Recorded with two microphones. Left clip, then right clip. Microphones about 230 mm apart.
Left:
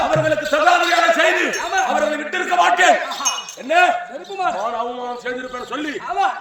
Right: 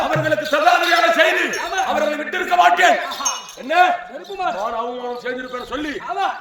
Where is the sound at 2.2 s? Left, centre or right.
Centre.